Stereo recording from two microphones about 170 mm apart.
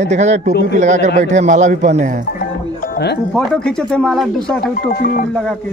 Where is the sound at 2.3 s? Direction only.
55° left (ahead or behind).